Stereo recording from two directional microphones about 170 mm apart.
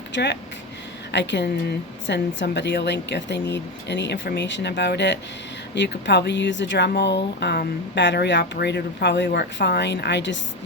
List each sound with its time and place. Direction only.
0.1 s speech: 90° left